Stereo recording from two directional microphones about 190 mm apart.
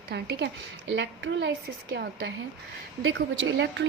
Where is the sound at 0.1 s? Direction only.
60° right (ahead or behind).